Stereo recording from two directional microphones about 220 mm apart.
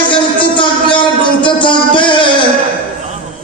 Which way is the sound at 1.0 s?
20° left (ahead or behind).